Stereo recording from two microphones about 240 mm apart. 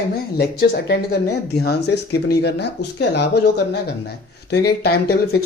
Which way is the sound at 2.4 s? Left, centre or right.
Left.